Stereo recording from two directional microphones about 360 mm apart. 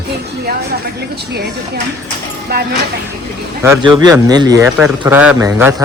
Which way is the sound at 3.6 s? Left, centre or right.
Centre.